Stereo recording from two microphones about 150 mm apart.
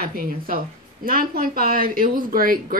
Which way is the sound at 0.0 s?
75° right (ahead or behind).